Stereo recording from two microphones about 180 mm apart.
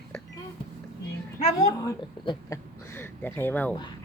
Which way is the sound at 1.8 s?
20° left (ahead or behind).